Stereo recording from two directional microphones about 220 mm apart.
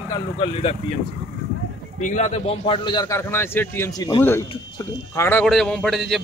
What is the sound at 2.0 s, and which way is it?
A man's voice, 30° left (ahead or behind).